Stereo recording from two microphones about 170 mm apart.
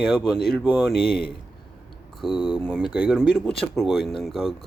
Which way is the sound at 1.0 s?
65° left (ahead or behind).